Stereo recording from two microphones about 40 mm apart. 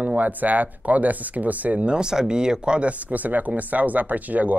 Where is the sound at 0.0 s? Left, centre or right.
Right.